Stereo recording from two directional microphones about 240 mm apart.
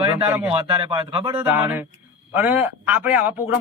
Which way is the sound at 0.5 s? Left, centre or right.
Right.